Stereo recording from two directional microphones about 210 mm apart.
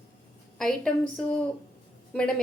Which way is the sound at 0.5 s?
5° left (ahead or behind).